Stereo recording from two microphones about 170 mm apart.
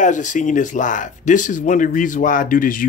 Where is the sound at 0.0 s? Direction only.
45° left (ahead or behind).